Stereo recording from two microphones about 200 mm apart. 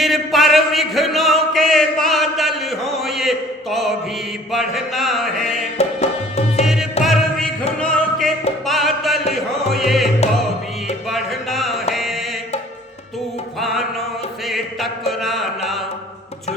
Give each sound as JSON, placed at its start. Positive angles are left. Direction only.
{"t": 0.0, "sound": "a sound", "side_deg": 0}
{"t": 4.5, "sound": "mantra", "side_deg": 0}
{"t": 5.7, "sound": "music", "side_deg": 30}
{"t": 7.0, "sound": "music", "side_deg": 0}
{"t": 11.1, "sound": "music", "side_deg": 0}
{"t": 13.6, "sound": "music", "side_deg": 0}
{"t": 14.4, "sound": "chant", "side_deg": 0}